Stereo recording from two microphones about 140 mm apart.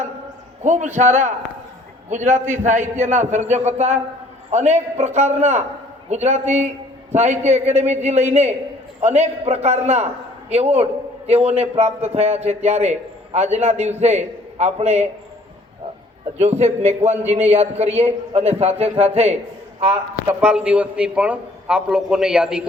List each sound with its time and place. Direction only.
0.6 s a man's voice: 60° right (ahead or behind)
16.4 s a man's voice: 55° right (ahead or behind)
20.2 s a man's voice: 10° right (ahead or behind)